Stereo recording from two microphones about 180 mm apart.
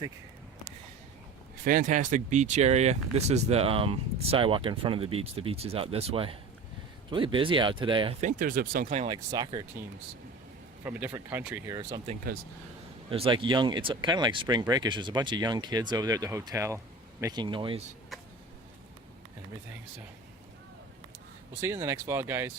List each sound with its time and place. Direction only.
1.6 s speech: 50° right (ahead or behind); by 8.1 s 25° right (ahead or behind)
8.2 s speech: 45° right (ahead or behind)
9.0 s speech: 20° right (ahead or behind)
10.8 s speech: 10° right (ahead or behind)
12.3 s speech: 55° right (ahead or behind)
13.1 s speech: 30° right (ahead or behind)
21.6 s speech: 15° right (ahead or behind)